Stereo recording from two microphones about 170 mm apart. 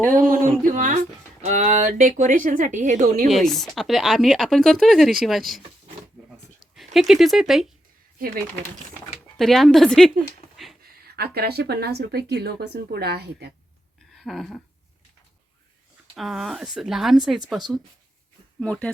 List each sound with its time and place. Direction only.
0.1 s speech: 55° right (ahead or behind)
0.6 s a sound: 50° right (ahead or behind)
1.5 s speech: 45° right (ahead or behind)
3.2 s speech: centre (ahead or behind)
6.3 s a sound: centre (ahead or behind)
9.4 s speech: centre (ahead or behind)
11.2 s speech: 70° right (ahead or behind)
14.2 s a sound: centre (ahead or behind)
16.1 s speech: centre (ahead or behind)
18.6 s speech: 5° left (ahead or behind)